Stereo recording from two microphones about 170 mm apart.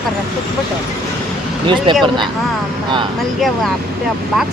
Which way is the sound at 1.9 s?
30° right (ahead or behind).